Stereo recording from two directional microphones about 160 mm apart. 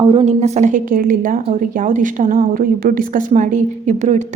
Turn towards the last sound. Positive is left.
turn(degrees=-45)  # may be behind; listen again after turning